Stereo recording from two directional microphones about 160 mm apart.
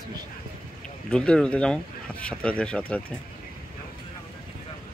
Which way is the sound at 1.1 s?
5° left (ahead or behind).